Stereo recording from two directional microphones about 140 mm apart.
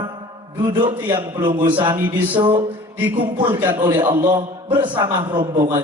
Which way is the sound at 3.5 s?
35° right (ahead or behind).